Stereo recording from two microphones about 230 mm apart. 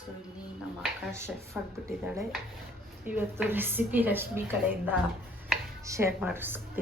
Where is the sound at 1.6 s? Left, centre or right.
Centre.